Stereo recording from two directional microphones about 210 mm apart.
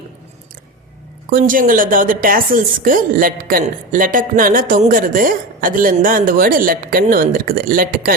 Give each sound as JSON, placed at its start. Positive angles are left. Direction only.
{"t": 1.3, "sound": "a woman's voice", "side_deg": -40}